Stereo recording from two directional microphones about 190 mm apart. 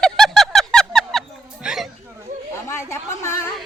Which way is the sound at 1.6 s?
Centre (ahead or behind).